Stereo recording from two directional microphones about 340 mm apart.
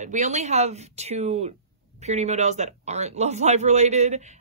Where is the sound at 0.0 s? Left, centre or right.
Right.